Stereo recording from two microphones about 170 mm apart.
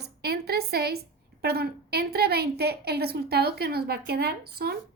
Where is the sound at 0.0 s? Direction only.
70° right (ahead or behind).